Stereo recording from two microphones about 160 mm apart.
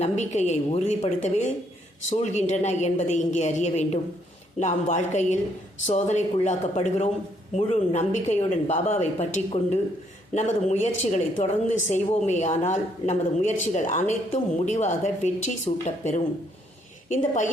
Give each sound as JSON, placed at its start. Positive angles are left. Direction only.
{"t": 0.0, "sound": "a woman's voice", "side_deg": 45}